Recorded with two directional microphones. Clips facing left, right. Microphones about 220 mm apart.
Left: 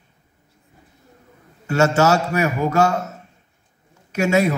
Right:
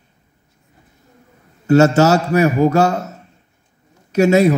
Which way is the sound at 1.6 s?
40° right (ahead or behind).